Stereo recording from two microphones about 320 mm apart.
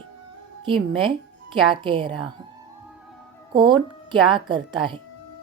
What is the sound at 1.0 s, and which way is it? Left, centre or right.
Speech, centre.